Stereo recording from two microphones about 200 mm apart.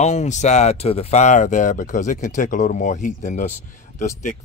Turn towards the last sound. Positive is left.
turn(degrees=40)  # may be behind; listen again after turning